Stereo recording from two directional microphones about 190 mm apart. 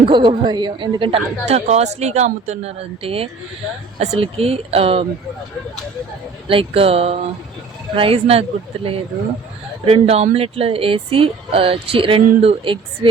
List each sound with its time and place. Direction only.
0.0 s speech: 25° right (ahead or behind)
6.5 s speech: 30° right (ahead or behind)